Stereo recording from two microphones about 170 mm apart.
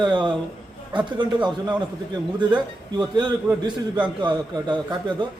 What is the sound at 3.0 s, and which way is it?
A man's voice, 25° right (ahead or behind).